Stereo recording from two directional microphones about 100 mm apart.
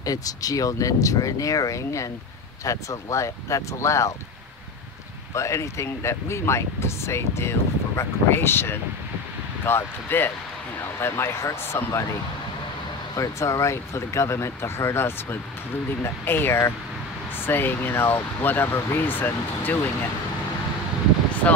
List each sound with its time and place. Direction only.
0.0 s speech: 35° left (ahead or behind)
5.3 s speech: 30° left (ahead or behind)
13.1 s speech: 35° left (ahead or behind)